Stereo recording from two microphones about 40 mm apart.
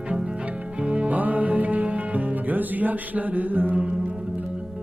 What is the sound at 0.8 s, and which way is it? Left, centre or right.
Music, right.